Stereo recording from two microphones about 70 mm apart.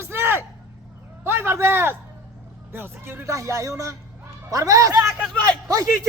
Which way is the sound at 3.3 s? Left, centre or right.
Right.